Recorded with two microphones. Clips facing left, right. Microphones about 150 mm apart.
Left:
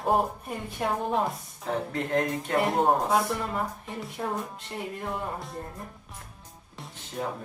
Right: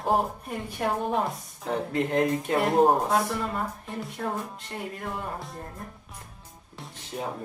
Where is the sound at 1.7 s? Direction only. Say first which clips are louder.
Right 2 dB; 15° right (ahead or behind).